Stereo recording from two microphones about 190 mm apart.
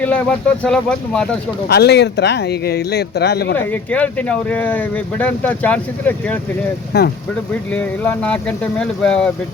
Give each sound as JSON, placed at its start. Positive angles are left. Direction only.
{"t": 0.0, "sound": "speech", "side_deg": 5}
{"t": 1.6, "sound": "speech", "side_deg": 60}
{"t": 3.6, "sound": "speech", "side_deg": 10}
{"t": 6.9, "sound": "speech", "side_deg": 55}
{"t": 7.7, "sound": "speech", "side_deg": 10}